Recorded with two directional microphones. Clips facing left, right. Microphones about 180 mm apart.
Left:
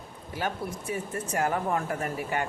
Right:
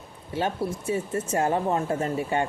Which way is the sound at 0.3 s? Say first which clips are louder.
Right 5 dB; 25° right (ahead or behind).